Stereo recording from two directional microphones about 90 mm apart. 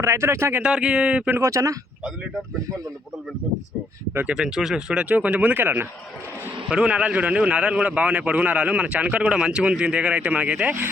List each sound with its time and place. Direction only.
0.0 s speech: 30° right (ahead or behind)
0.6 s a man's voice: 10° right (ahead or behind)
1.3 s speech: 35° right (ahead or behind)
4.3 s a man's voice: 10° right (ahead or behind); by 5.9 s 25° right (ahead or behind)
6.7 s a man's voice: 10° right (ahead or behind)